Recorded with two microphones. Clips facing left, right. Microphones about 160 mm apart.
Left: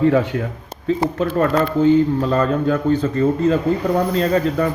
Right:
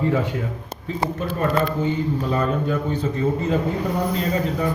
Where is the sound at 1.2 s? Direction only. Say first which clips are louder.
Left 3 dB; 90° left.